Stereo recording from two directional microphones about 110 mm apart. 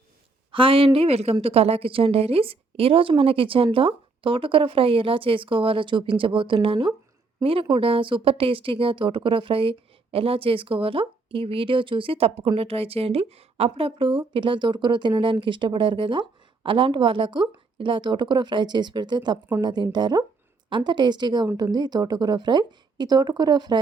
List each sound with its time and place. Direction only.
0.5 s speech: 55° right (ahead or behind)
0.9 s a woman's voice: 70° right (ahead or behind); by 23.8 s 40° right (ahead or behind)